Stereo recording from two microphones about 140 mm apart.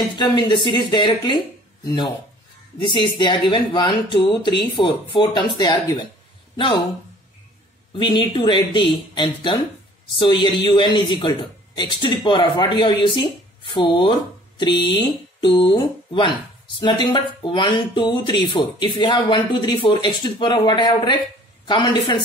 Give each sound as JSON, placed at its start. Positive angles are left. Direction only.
{"t": 0.2, "sound": "speech", "side_deg": 30}
{"t": 3.2, "sound": "speech", "side_deg": 35}
{"t": 8.0, "sound": "speech", "side_deg": 35}